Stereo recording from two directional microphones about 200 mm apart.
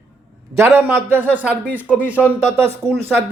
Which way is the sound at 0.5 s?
15° right (ahead or behind).